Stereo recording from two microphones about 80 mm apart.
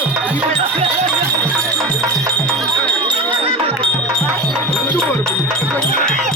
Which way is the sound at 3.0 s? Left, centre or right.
Centre.